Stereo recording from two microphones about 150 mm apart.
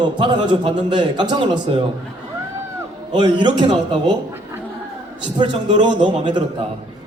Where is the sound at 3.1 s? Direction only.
30° right (ahead or behind).